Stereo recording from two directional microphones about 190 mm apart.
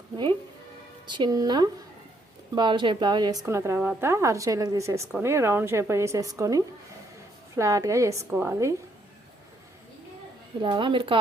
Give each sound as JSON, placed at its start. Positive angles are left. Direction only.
{"t": 1.0, "sound": "a woman's voice", "side_deg": -25}
{"t": 10.6, "sound": "a woman's voice", "side_deg": -25}